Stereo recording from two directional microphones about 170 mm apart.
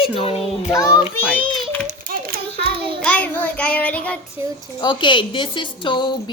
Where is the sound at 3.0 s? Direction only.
10° left (ahead or behind).